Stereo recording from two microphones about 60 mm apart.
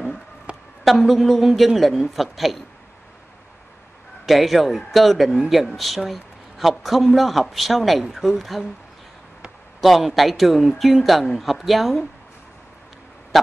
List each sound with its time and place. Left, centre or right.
0.5 s a sound: centre
0.8 s speech: centre
4.3 s speech: centre
9.8 s speech: centre